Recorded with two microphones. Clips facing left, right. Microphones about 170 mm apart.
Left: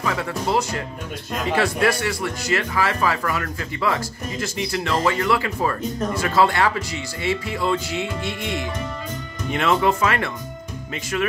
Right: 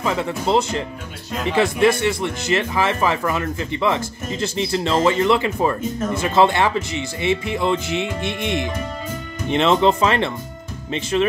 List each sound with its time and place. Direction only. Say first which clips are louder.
0.0 s speech: right 3 dB; 25° right (ahead or behind)